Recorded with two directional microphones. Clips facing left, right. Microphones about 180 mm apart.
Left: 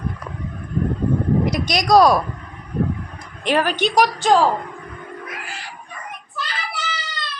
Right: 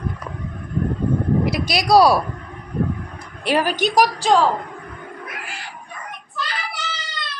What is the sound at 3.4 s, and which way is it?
Speech, 10° right (ahead or behind).